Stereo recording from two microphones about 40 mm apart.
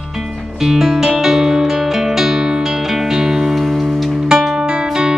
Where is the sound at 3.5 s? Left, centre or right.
Centre.